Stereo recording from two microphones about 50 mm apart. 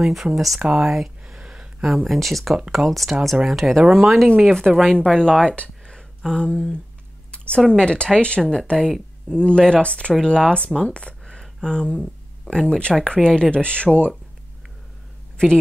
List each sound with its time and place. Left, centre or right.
0.0 s speech: centre
0.7 s a sound: centre
2.0 s speech: centre
4.7 s speech: right
5.0 s speech: centre
5.9 s a sound: centre
7.2 s speech: left
15.3 s speech: centre